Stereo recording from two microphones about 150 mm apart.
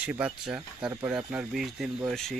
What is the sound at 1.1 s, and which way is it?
Speech, 5° right (ahead or behind).